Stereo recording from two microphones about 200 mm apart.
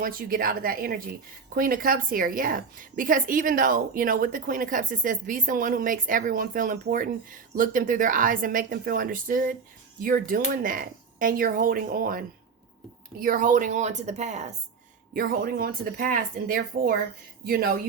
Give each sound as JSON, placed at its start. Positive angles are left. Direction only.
{"t": 0.0, "sound": "a woman's voice", "side_deg": -45}
{"t": 15.1, "sound": "a woman's voice", "side_deg": -45}